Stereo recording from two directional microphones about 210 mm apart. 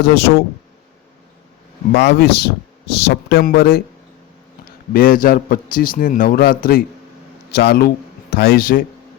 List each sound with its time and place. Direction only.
0.0 s speech: 50° left (ahead or behind)
1.9 s speech: 50° left (ahead or behind)
4.9 s a man's voice: 45° left (ahead or behind)